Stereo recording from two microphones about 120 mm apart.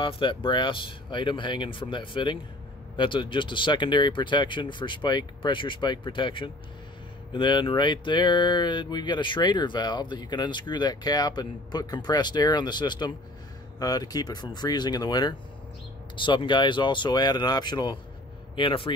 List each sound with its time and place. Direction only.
0.0 s speech: 45° left (ahead or behind)